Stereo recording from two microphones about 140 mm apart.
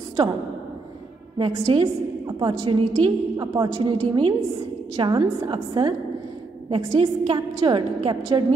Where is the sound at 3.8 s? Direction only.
35° right (ahead or behind).